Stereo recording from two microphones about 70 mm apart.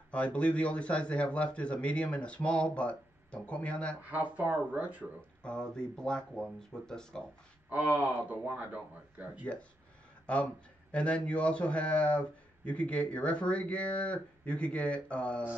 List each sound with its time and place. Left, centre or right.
0.1 s speech: centre
4.4 s speech: right
5.4 s speech: centre
7.7 s speech: right
10.2 s speech: centre